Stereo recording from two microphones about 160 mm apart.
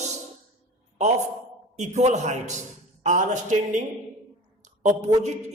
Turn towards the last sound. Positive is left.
turn(degrees=-45)  # may be behind; listen again after turning